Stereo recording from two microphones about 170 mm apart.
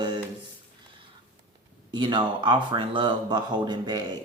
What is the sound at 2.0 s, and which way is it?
Speech, 25° right (ahead or behind).